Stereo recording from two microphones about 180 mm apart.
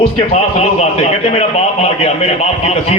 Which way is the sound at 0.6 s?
35° left (ahead or behind).